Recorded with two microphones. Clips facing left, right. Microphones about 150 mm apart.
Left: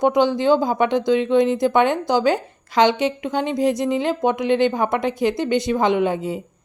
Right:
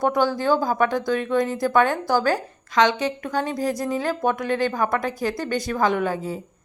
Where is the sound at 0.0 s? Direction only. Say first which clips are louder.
Left 4 dB; 20° left (ahead or behind).